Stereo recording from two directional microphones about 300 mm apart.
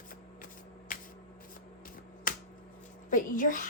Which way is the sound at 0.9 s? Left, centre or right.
Left.